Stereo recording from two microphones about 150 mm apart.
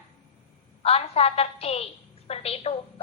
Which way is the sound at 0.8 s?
40° left (ahead or behind).